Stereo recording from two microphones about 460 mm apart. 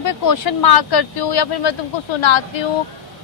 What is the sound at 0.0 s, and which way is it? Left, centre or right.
Speech, left.